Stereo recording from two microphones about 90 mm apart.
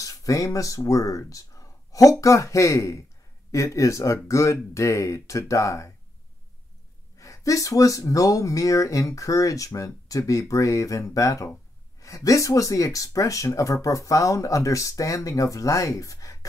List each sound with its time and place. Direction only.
0.0 s speech: 40° left (ahead or behind)
7.2 s speech: 35° left (ahead or behind)